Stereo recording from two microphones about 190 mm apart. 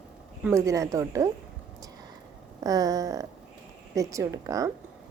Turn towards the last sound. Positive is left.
turn(degrees=-15)  # may be behind; listen again after turning